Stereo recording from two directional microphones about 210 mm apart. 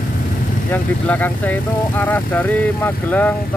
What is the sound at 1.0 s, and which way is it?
Speech, 5° left (ahead or behind).